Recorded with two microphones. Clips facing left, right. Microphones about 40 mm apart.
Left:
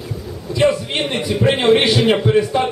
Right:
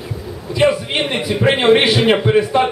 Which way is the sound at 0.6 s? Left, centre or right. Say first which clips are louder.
Right 1 dB; centre.